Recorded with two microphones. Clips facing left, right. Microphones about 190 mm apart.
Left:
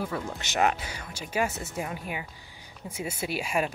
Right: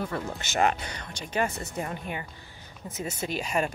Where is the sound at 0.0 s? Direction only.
Centre (ahead or behind).